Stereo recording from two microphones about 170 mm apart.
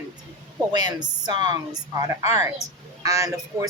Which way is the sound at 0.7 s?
25° right (ahead or behind).